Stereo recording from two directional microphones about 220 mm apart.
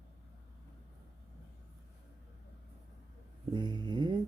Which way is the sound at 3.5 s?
20° right (ahead or behind).